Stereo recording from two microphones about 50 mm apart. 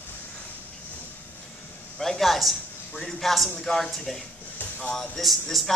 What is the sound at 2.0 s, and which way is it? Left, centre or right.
A man's voice, centre.